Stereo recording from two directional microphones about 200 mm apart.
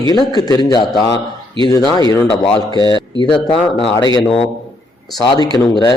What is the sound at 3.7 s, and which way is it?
Speech, 25° left (ahead or behind).